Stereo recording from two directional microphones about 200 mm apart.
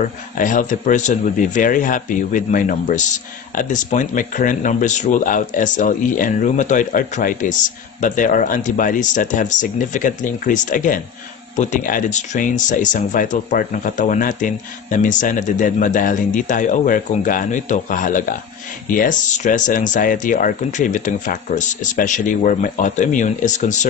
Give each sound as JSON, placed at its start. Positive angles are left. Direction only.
{"t": 0.4, "sound": "speech", "side_deg": 40}